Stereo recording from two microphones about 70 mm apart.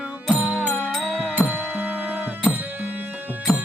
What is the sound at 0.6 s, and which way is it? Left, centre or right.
Music, right.